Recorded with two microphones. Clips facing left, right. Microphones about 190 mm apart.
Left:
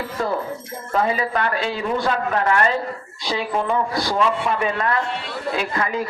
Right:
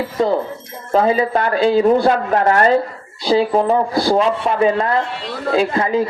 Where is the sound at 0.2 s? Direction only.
20° right (ahead or behind).